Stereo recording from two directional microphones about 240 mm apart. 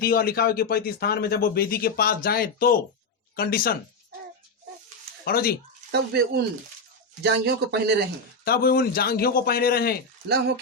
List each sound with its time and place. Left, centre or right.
0.0 s speech: left
5.2 s speech: left
5.9 s speech: right
8.4 s speech: left